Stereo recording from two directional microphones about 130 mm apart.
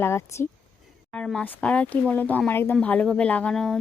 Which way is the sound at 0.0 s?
20° left (ahead or behind).